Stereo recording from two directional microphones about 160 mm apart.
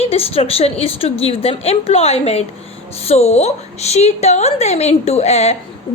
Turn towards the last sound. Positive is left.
turn(degrees=45)  # may be behind; listen again after turning